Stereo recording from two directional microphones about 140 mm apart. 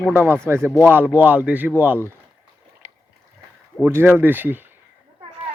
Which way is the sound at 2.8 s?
55° right (ahead or behind).